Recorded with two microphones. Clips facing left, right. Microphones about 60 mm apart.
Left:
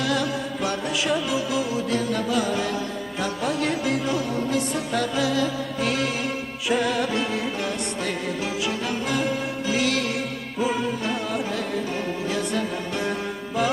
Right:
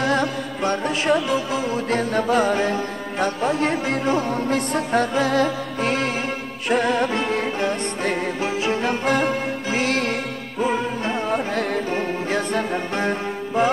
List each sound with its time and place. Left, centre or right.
0.0 s music: right